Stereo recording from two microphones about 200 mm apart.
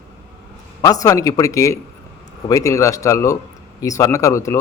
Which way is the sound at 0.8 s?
20° left (ahead or behind).